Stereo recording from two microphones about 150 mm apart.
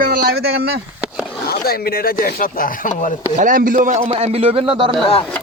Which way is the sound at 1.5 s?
90° left.